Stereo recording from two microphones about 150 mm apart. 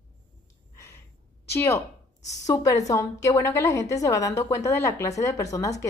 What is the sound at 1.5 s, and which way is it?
A woman's voice, 15° left (ahead or behind).